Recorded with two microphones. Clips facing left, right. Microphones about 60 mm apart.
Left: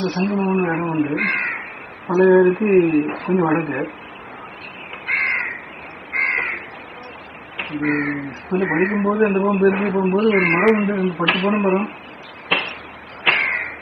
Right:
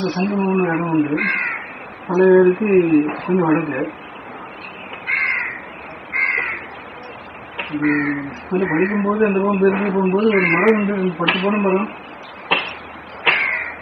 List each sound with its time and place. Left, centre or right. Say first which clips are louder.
0.0 s speech: right 1 dB; right
2.1 s speech: even; left
2.5 s speech: right 1 dB; right
5.0 s crow: right 1 dB; right
7.6 s speech: right 2 dB; right
10.8 s speech: right 1 dB; right
12.5 s a sound: right 1 dB; right